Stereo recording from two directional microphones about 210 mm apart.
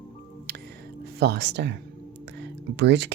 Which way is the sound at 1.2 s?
50° right (ahead or behind).